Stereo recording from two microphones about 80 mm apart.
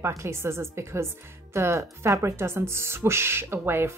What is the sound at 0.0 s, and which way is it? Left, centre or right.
Speech, right.